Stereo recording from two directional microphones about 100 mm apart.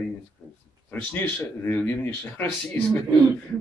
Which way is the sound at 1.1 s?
20° left (ahead or behind).